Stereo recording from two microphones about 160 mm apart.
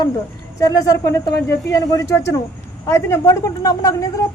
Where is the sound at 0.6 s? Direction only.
20° left (ahead or behind).